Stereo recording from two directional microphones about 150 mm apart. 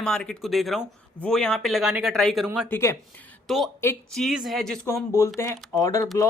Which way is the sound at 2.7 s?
15° left (ahead or behind).